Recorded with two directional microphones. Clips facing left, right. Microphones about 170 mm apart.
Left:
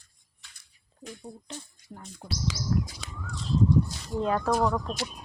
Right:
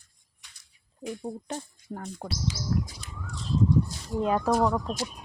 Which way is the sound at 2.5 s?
90° left.